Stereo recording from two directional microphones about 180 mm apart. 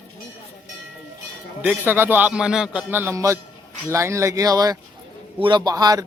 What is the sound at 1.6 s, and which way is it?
A man's voice, 10° right (ahead or behind).